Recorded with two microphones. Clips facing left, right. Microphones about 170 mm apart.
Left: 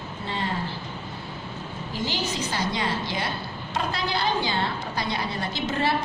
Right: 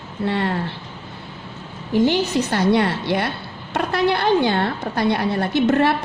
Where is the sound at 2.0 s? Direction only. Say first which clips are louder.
Right 7 dB; 60° right (ahead or behind).